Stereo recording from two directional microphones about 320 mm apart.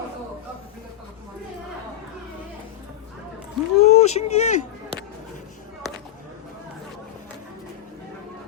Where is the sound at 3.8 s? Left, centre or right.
Centre.